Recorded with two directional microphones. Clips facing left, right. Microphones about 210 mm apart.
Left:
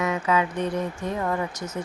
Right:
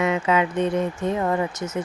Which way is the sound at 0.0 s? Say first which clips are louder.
Right 3 dB; 25° right (ahead or behind).